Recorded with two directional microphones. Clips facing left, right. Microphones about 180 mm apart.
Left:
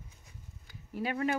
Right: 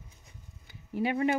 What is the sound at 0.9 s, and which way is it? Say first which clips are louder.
Speech: right 4 dB; 15° right (ahead or behind).